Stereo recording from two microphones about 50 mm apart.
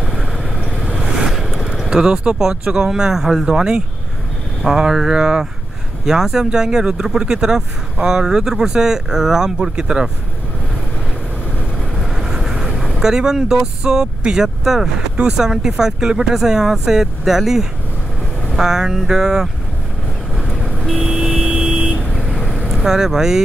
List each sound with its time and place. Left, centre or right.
0.9 s vehicle: centre
1.8 s speech: centre
12.0 s vehicle: centre
13.0 s speech: centre
20.3 s vehicle: centre
21.5 s vehicle: right
22.5 s vehicle: centre
22.8 s speech: centre